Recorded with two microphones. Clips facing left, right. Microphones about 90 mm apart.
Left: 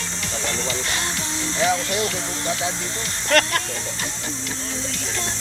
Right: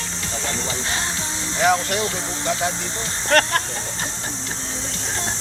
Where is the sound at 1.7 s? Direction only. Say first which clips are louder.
Right 1 dB; 30° right (ahead or behind).